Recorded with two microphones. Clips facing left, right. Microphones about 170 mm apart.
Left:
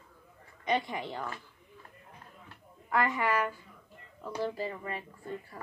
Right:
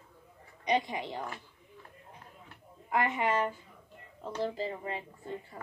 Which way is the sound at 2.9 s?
20° right (ahead or behind).